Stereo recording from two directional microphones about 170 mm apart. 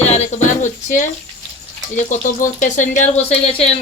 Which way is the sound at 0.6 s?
45° left (ahead or behind).